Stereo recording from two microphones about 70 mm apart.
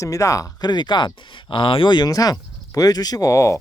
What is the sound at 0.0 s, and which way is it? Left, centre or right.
Speech, left.